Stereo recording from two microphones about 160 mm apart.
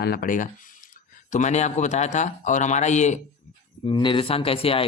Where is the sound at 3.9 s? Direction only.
30° left (ahead or behind).